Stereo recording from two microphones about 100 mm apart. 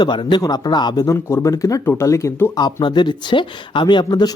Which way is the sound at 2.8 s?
50° left (ahead or behind).